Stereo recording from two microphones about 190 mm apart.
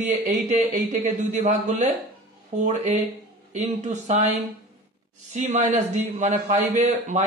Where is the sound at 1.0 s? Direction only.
40° right (ahead or behind).